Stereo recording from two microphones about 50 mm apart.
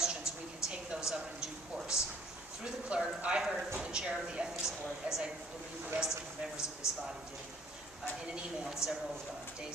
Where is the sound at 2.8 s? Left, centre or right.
Centre.